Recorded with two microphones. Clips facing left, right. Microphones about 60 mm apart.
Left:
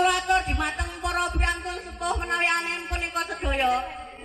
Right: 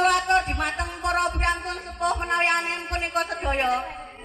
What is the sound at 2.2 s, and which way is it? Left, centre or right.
Speech, centre.